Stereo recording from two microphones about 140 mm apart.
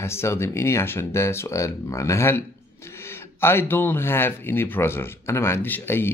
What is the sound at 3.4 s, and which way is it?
Speech, 15° left (ahead or behind).